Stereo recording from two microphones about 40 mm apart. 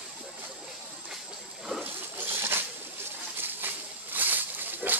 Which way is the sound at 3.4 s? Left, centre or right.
Right.